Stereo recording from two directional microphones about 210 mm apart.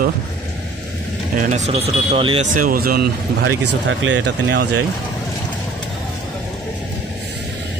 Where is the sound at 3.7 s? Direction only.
60° right (ahead or behind).